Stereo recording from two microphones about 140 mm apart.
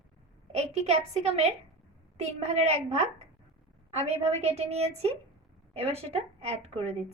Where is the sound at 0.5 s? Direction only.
50° right (ahead or behind).